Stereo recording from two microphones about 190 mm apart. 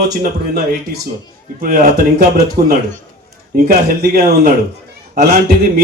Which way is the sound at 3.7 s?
55° right (ahead or behind).